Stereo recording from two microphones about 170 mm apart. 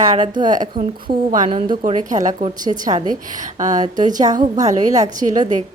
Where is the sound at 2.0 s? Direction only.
45° right (ahead or behind).